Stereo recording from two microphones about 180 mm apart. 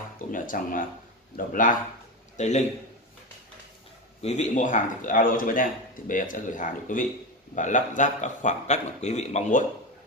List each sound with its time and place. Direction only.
0.3 s a man's voice: 50° left (ahead or behind)
4.2 s a man's voice: 40° left (ahead or behind)